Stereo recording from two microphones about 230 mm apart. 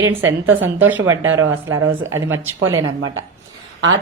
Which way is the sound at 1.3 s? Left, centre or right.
Right.